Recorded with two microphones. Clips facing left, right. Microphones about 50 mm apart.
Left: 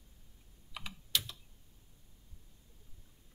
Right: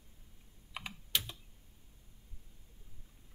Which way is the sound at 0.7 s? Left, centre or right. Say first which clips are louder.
Even; right.